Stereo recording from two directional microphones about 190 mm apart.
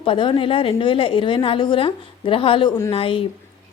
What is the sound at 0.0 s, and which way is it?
A woman's voice, 25° left (ahead or behind).